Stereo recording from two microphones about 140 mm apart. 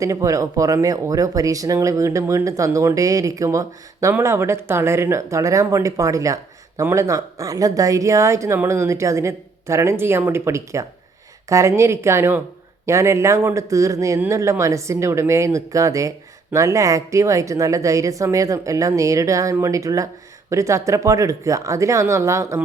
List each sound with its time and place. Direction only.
0.0 s a man's voice: 20° right (ahead or behind)